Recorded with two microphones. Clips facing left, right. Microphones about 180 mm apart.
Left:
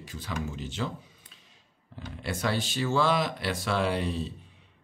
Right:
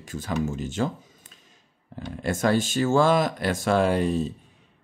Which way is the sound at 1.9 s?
45° right (ahead or behind).